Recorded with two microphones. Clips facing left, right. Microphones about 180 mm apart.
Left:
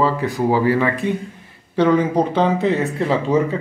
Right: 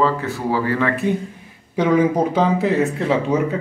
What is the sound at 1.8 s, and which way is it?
Speech, 5° right (ahead or behind).